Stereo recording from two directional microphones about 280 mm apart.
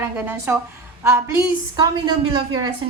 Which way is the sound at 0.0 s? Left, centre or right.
Centre.